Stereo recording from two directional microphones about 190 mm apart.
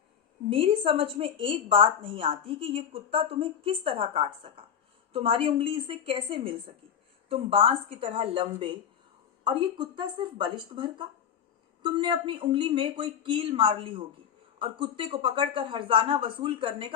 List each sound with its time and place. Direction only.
0.5 s a woman's voice: 30° right (ahead or behind)